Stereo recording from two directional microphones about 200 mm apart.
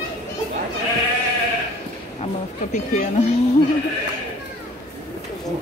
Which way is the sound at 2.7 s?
35° left (ahead or behind).